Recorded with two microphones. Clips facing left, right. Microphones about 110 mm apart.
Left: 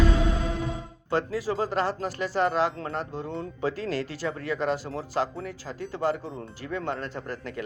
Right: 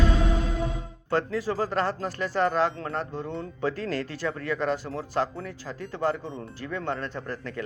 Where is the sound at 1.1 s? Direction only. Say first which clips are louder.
Even; 25° left (ahead or behind).